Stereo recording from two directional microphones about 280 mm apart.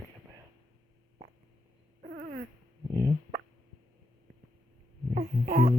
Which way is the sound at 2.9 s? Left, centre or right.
Centre.